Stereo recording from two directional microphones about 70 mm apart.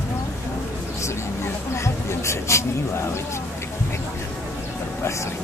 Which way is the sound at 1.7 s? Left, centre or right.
Left.